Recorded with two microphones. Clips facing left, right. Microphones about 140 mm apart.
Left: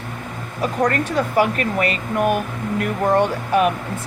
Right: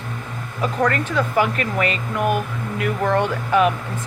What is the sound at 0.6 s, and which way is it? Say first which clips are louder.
Speech: left 1 dB; 40° left (ahead or behind).